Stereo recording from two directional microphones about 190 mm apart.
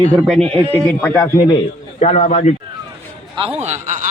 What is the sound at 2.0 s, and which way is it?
Speech, 40° left (ahead or behind).